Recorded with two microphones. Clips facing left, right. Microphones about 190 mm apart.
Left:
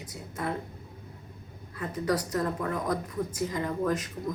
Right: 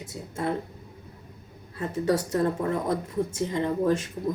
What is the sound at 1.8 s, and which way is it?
Speech, 25° right (ahead or behind).